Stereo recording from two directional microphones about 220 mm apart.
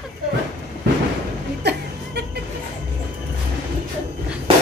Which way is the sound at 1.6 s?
50° right (ahead or behind).